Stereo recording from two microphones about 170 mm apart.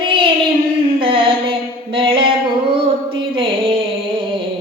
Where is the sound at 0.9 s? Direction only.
30° right (ahead or behind).